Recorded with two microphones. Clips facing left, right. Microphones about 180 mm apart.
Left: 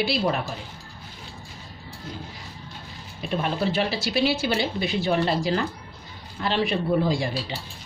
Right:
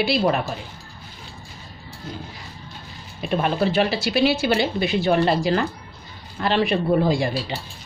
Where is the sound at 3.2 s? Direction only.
65° right (ahead or behind).